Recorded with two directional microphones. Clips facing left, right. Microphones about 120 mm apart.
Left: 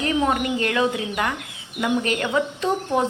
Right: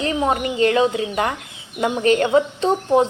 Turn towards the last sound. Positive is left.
turn(degrees=-30)  # may be behind; listen again after turning